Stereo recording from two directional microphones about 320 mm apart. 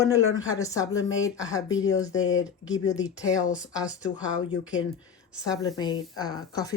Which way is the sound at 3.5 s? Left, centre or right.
Centre.